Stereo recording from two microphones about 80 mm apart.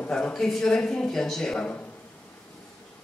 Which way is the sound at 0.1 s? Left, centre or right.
Centre.